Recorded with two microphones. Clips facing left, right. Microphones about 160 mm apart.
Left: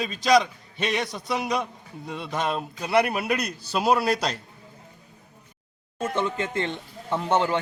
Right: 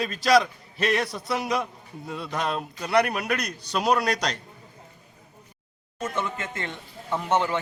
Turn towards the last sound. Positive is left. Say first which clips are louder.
# left 1 dB
turn(degrees=30)  # may be behind; listen again after turning